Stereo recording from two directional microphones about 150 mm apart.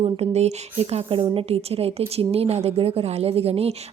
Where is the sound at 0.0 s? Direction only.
45° right (ahead or behind).